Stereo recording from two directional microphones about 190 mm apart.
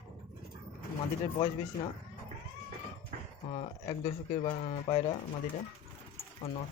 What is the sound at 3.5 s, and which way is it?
Speech, 30° left (ahead or behind).